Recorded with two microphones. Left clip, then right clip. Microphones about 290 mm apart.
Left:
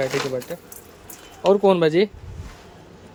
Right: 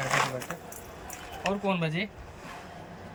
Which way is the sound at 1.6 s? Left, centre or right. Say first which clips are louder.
Left 14 dB; centre.